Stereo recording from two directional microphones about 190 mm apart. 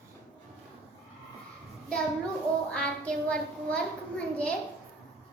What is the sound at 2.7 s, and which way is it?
A child's voice, 5° left (ahead or behind).